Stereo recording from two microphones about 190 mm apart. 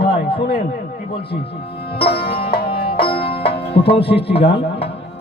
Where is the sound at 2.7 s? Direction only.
30° left (ahead or behind).